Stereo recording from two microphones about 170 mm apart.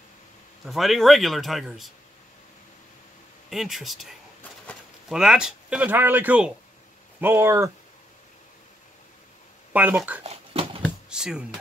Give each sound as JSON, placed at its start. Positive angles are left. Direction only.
{"t": 0.7, "sound": "speech", "side_deg": 0}
{"t": 3.4, "sound": "speech", "side_deg": 0}
{"t": 9.7, "sound": "speech", "side_deg": -10}
{"t": 10.2, "sound": "dog", "side_deg": -35}
{"t": 10.8, "sound": "a sound", "side_deg": -5}